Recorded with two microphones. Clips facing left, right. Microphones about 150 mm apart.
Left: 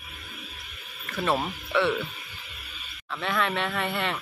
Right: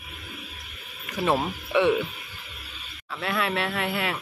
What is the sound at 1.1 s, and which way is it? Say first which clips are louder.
Speech: right 2 dB; 15° right (ahead or behind).